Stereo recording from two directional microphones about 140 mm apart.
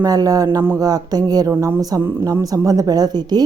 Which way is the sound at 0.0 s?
25° right (ahead or behind).